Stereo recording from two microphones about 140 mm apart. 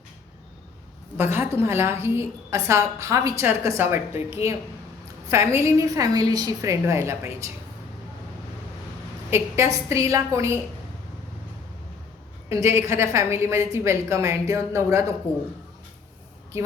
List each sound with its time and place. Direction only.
1.1 s a woman's voice: 15° right (ahead or behind)
9.3 s a woman's voice: 20° right (ahead or behind)
12.5 s a woman's voice: 20° right (ahead or behind)
16.5 s speech: 20° right (ahead or behind)